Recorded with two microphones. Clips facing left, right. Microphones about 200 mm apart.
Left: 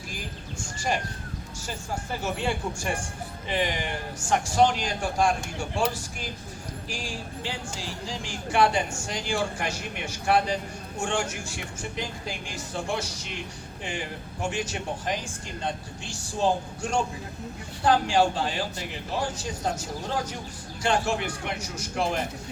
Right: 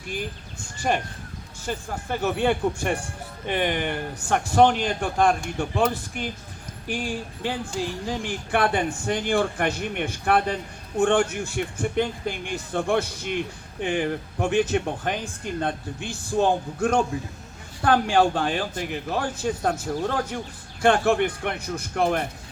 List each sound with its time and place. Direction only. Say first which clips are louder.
1.6 s speech: right 5 dB; 60° right (ahead or behind)